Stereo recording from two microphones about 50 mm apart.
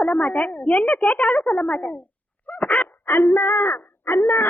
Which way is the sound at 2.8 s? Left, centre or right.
Left.